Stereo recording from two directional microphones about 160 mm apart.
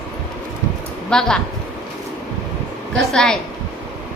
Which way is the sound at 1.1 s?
5° left (ahead or behind).